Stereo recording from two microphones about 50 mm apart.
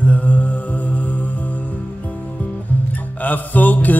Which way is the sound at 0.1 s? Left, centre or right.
Left.